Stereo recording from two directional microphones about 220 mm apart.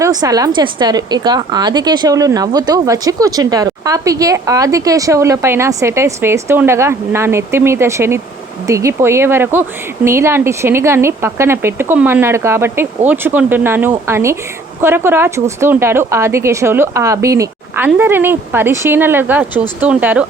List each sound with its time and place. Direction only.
0.0 s a woman's voice: 15° right (ahead or behind)